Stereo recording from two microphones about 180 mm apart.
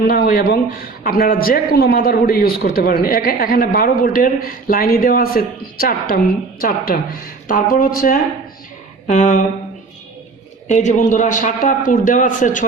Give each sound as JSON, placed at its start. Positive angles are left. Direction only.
{"t": 0.1, "sound": "a man's voice", "side_deg": 55}
{"t": 10.7, "sound": "a man's voice", "side_deg": 45}